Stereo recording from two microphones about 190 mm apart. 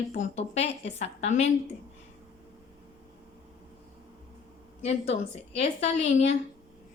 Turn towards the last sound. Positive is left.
turn(degrees=35)  # may be behind; listen again after turning